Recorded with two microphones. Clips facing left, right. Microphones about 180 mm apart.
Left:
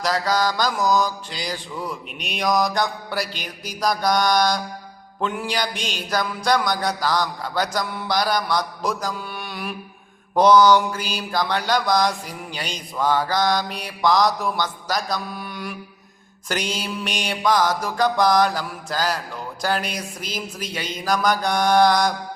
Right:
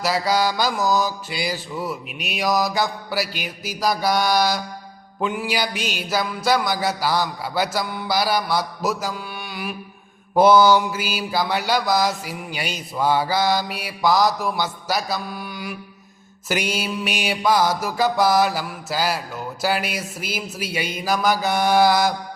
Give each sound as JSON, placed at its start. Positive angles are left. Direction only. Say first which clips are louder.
{"t": 0.0, "sound": "mantra", "louder": "right 1 dB", "side_deg": -10}